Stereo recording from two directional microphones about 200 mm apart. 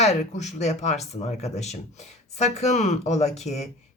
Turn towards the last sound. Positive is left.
turn(degrees=35)  # may be behind; listen again after turning